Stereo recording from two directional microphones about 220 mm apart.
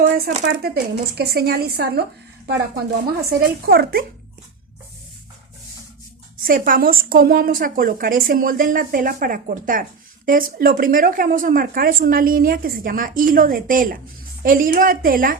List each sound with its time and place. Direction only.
0.0 s speech: 35° right (ahead or behind)
0.4 s speech: 45° right (ahead or behind)
3.2 s speech: 45° right (ahead or behind)
6.4 s a woman's voice: 40° right (ahead or behind)